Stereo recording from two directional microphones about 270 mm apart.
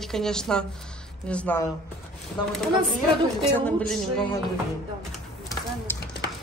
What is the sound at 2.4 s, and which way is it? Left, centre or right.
A woman's voice, centre.